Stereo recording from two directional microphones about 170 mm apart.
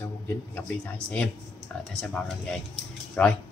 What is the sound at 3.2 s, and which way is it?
Speech, 5° left (ahead or behind).